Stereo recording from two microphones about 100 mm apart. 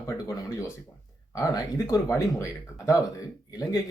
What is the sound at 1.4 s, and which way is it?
Speech, 30° left (ahead or behind).